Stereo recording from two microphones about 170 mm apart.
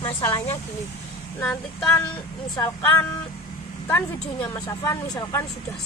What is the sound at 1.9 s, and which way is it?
A woman's voice, 15° left (ahead or behind).